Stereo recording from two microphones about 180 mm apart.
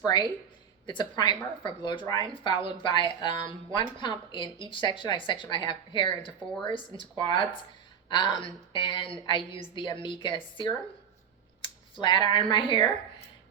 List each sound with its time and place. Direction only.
0.0 s speech: 25° left (ahead or behind)